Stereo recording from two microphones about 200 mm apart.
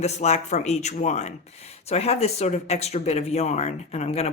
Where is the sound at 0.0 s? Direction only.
35° left (ahead or behind).